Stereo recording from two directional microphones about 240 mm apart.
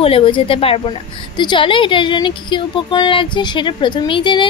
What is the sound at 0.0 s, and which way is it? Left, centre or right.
A woman's voice, left.